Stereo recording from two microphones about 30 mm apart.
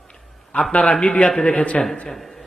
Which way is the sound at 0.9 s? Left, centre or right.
Left.